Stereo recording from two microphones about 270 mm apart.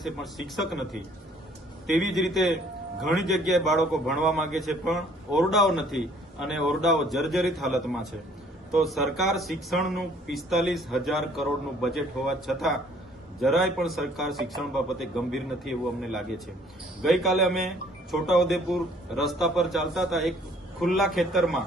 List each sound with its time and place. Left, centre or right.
0.0 s a man's voice: centre
1.9 s a man's voice: centre